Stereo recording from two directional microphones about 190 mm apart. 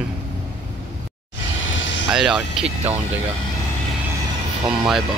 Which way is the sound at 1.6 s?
75° left (ahead or behind).